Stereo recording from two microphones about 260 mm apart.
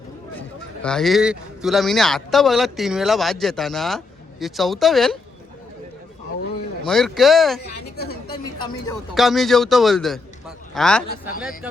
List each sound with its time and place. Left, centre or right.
0.8 s speech: centre
6.8 s speech: centre
7.9 s a woman's voice: left
8.5 s speech: centre
9.1 s speech: centre